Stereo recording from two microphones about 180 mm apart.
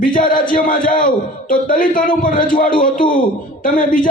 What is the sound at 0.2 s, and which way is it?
A man's voice, 50° left (ahead or behind).